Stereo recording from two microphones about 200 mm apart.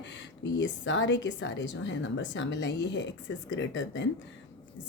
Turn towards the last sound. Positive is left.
turn(degrees=65)  # may be behind; listen again after turning